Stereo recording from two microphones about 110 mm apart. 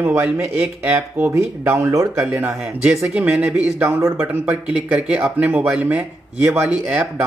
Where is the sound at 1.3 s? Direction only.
25° right (ahead or behind).